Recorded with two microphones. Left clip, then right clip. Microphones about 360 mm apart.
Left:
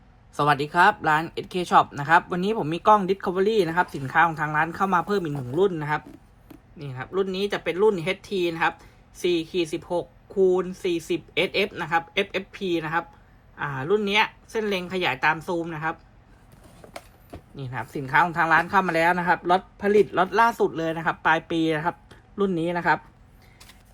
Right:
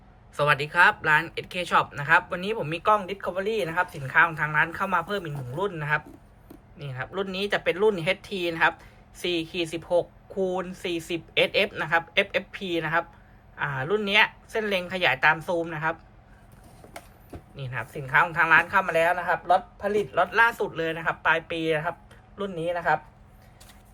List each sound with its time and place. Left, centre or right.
0.3 s speech: centre
16.8 s clip-clop: left
17.6 s speech: centre